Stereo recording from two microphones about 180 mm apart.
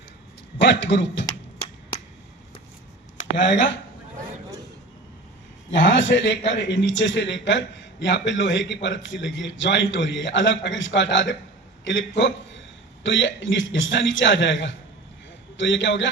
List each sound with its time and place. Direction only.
0.6 s a man's voice: 75° left (ahead or behind)
3.3 s a man's voice: 85° left
5.7 s a man's voice: 80° left